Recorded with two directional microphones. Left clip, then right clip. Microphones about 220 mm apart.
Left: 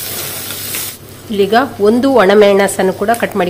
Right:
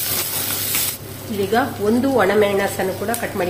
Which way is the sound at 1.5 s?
45° left (ahead or behind).